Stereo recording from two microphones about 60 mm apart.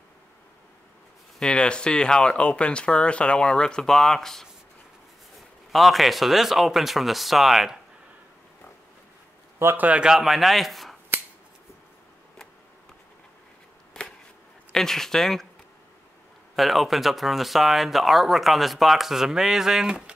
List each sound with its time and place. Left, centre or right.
1.4 s speech: centre
5.7 s speech: centre
9.8 s a man's voice: right
10.0 s speech: centre
14.7 s speech: centre
16.5 s speech: centre